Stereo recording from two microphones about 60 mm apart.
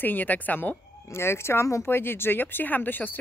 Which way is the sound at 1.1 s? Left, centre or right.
Left.